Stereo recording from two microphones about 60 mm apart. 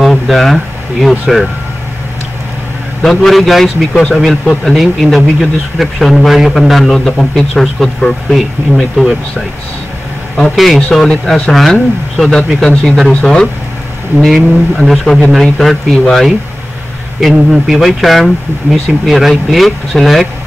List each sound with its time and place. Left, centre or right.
0.0 s a sound: centre
3.0 s speech: centre
3.9 s speech: centre
4.2 s speech: centre
10.3 s speech: centre
11.1 s speech: centre
11.5 s speech: centre
14.2 s speech: centre
17.2 s speech: centre